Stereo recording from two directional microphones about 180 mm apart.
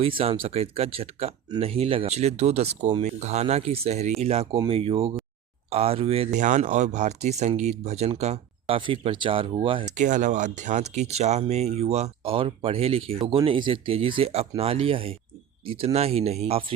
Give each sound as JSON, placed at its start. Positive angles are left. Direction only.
{"t": 0.0, "sound": "speech", "side_deg": -30}
{"t": 6.4, "sound": "speech", "side_deg": -45}
{"t": 9.9, "sound": "speech", "side_deg": -45}